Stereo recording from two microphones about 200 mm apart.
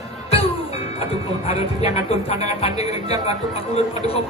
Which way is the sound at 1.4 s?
30° left (ahead or behind).